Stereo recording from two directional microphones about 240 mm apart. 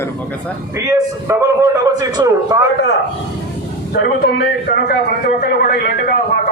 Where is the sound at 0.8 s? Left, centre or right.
Centre.